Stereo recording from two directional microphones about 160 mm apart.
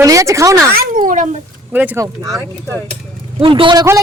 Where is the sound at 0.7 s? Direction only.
55° right (ahead or behind).